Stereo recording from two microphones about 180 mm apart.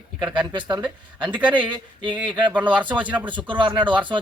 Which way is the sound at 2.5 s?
10° right (ahead or behind).